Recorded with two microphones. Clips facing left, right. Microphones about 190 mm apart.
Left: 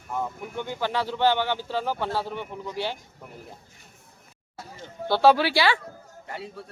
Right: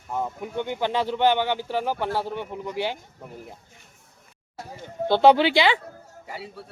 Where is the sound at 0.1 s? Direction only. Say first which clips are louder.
Right 2 dB; 20° right (ahead or behind).